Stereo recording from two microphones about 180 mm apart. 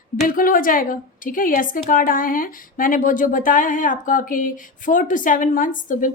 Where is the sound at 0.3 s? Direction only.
50° left (ahead or behind).